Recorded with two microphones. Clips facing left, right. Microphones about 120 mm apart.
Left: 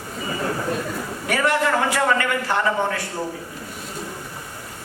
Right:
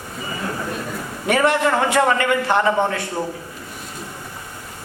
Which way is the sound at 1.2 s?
25° right (ahead or behind).